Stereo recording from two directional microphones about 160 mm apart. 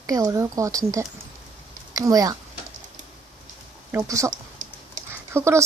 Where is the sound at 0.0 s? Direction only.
20° right (ahead or behind).